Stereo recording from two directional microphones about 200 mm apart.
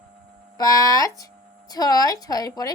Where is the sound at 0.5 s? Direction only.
15° left (ahead or behind).